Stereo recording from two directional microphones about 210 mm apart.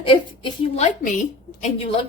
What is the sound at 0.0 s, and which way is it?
Speech, 25° left (ahead or behind).